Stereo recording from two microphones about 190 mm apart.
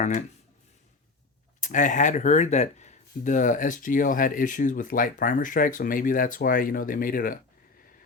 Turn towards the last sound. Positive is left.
turn(degrees=50)  # may be behind; listen again after turning